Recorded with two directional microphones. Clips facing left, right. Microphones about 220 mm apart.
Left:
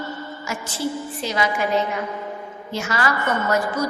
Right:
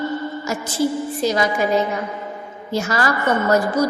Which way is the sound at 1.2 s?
40° right (ahead or behind).